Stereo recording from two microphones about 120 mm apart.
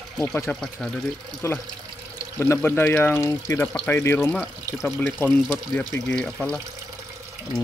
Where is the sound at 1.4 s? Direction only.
20° left (ahead or behind).